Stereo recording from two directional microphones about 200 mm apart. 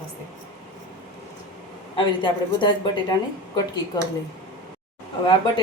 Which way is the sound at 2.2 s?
20° left (ahead or behind).